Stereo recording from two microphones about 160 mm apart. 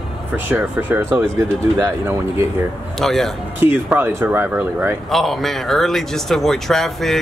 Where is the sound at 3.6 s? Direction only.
10° right (ahead or behind).